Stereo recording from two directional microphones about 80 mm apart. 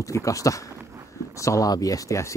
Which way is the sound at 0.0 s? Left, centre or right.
Left.